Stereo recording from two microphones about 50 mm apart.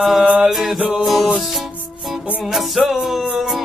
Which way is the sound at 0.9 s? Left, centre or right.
Centre.